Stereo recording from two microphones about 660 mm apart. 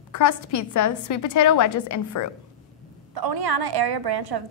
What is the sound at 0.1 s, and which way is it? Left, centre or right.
A woman's voice, left.